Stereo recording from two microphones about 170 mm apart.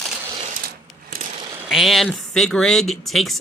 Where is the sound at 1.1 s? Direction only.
45° right (ahead or behind).